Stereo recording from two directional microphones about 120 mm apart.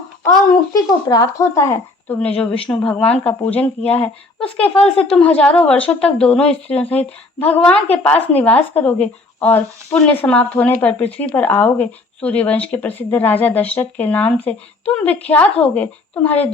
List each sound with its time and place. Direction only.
0.3 s speech: 30° left (ahead or behind)
2.1 s a woman's voice: 10° left (ahead or behind)